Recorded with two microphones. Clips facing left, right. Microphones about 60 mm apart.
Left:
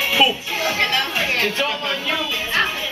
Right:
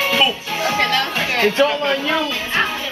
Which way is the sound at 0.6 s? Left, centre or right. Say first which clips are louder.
Right 3 dB; right.